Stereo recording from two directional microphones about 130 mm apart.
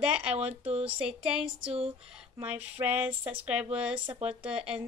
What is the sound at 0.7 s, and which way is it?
Speech, 50° right (ahead or behind).